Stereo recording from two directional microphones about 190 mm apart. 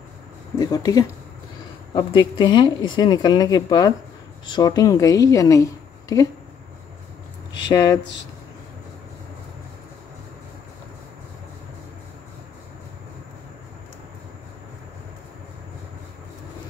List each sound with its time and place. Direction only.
0.6 s a woman's voice: 20° left (ahead or behind)
7.7 s a woman's voice: 20° left (ahead or behind)